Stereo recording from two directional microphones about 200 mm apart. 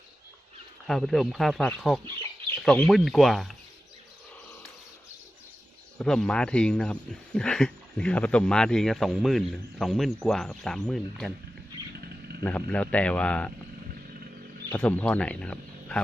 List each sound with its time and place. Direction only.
0.9 s speech: centre (ahead or behind)
2.0 s chicken: 25° right (ahead or behind)
2.6 s speech: 5° left (ahead or behind)
6.0 s speech: 5° left (ahead or behind)
12.5 s speech: 5° left (ahead or behind)
14.7 s speech: 5° left (ahead or behind)